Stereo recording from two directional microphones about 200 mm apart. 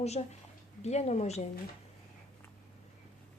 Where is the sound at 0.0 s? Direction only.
30° left (ahead or behind).